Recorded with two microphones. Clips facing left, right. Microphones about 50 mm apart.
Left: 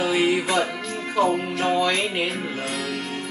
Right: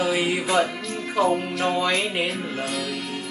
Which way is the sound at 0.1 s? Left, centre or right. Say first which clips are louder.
Left 3 dB; centre.